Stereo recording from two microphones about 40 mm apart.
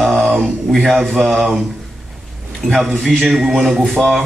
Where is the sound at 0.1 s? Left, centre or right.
Right.